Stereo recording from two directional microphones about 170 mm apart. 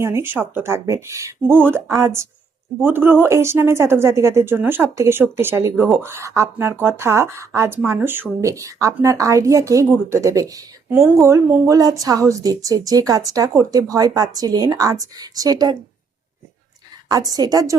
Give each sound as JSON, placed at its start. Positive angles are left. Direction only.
{"t": 0.0, "sound": "a woman's voice", "side_deg": -15}
{"t": 17.1, "sound": "a woman's voice", "side_deg": -20}